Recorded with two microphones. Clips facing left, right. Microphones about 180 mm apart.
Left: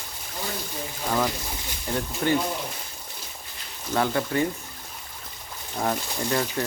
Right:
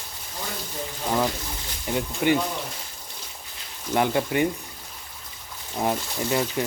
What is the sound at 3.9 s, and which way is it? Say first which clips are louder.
Speech: right 2 dB; 15° right (ahead or behind).